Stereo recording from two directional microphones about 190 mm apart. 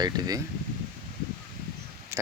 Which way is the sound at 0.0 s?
20° right (ahead or behind).